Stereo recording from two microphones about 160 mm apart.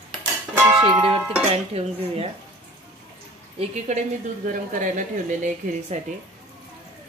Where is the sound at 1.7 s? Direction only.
40° right (ahead or behind).